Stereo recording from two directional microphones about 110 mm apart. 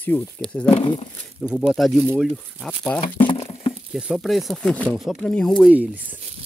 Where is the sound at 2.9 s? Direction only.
50° left (ahead or behind).